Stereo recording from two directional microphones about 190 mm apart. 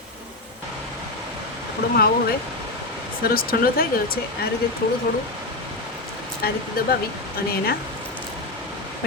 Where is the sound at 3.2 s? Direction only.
50° left (ahead or behind).